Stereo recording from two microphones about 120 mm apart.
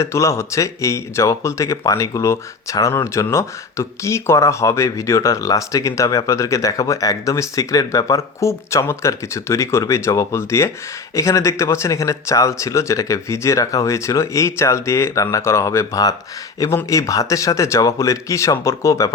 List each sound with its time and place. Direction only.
0.0 s speech: 25° left (ahead or behind)